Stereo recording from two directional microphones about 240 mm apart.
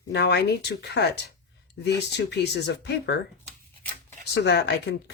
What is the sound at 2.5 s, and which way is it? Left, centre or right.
Speech, left.